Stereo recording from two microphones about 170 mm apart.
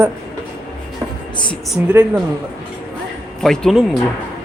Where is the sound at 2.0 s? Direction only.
15° right (ahead or behind).